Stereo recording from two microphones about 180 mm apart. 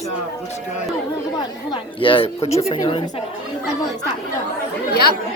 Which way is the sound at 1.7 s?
30° left (ahead or behind).